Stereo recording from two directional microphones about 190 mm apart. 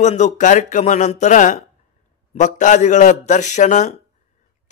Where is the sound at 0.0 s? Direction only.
40° left (ahead or behind).